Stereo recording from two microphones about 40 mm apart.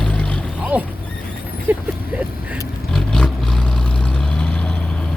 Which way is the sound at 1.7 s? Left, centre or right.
Right.